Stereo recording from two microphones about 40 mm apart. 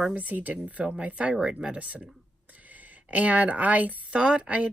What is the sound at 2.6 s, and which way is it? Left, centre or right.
Speech, right.